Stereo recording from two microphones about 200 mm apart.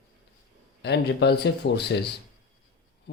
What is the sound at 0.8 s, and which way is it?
Speech, 55° left (ahead or behind).